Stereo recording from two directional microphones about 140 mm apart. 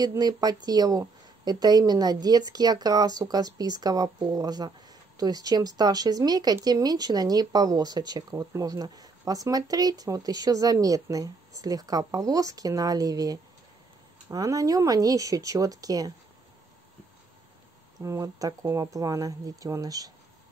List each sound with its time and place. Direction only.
0.0 s a woman's voice: 25° right (ahead or behind)
18.0 s a woman's voice: 25° right (ahead or behind)